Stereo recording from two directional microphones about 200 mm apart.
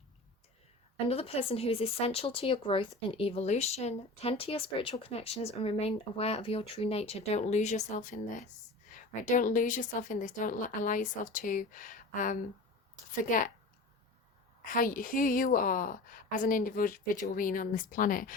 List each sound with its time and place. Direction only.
1.0 s a woman's voice: 30° left (ahead or behind)
14.6 s a woman's voice: 40° left (ahead or behind)